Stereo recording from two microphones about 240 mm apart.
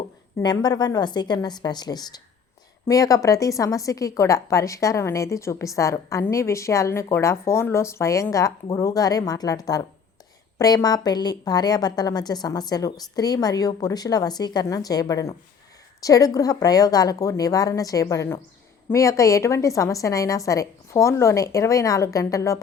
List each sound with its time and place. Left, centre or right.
0.3 s a woman's voice: centre